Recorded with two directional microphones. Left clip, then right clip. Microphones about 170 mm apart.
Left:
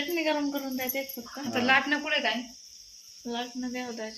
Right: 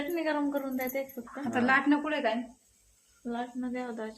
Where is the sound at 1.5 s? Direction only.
40° right (ahead or behind).